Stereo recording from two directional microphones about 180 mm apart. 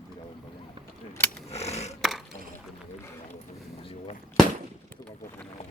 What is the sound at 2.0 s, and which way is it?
Chop, centre (ahead or behind).